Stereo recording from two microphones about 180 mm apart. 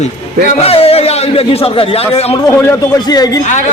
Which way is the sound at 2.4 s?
10° left (ahead or behind).